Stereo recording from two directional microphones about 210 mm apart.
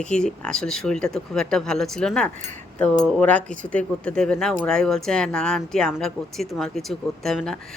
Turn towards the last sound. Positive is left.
turn(degrees=0)  # may be behind; listen again after turning